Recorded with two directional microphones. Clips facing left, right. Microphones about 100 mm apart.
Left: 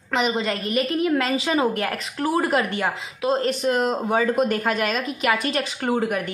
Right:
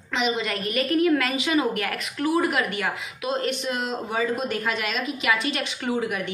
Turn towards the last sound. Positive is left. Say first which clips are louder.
# left 4 dB
turn(degrees=45)  # may be behind; listen again after turning